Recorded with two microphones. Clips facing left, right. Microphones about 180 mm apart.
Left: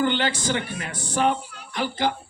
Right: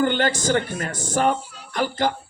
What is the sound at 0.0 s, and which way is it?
A man's voice, 45° right (ahead or behind).